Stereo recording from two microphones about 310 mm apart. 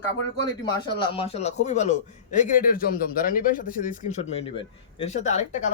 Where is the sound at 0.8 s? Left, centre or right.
Centre.